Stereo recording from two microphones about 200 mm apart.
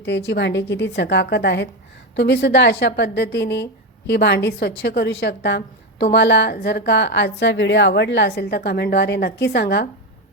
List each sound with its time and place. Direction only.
0.0 s a woman's voice: 60° left (ahead or behind)